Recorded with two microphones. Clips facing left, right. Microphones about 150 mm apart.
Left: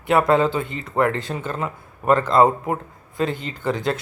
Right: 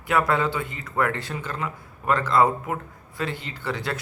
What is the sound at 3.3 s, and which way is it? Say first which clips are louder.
Speech: left 6 dB; 45° left (ahead or behind).